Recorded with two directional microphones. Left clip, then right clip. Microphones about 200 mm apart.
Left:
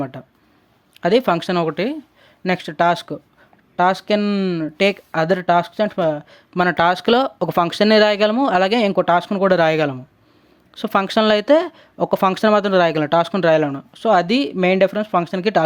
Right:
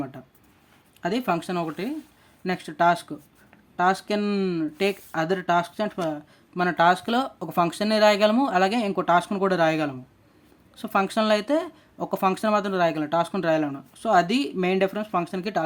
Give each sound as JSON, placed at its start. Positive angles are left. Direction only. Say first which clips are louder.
{"t": 0.0, "sound": "speech", "louder": "left 7 dB", "side_deg": 35}